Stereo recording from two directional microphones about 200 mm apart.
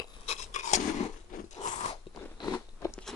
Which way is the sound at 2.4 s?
20° left (ahead or behind).